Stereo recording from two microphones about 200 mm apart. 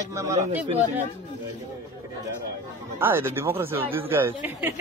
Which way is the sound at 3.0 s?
10° right (ahead or behind).